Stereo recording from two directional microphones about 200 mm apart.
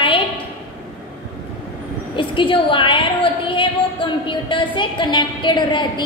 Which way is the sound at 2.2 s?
25° left (ahead or behind).